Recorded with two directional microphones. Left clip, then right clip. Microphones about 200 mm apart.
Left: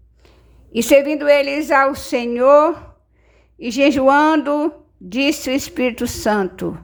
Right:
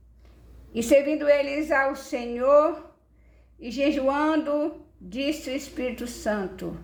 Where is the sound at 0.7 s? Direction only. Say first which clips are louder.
Left 7 dB; 25° left (ahead or behind).